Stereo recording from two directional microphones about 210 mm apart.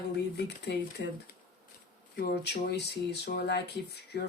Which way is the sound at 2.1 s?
50° left (ahead or behind).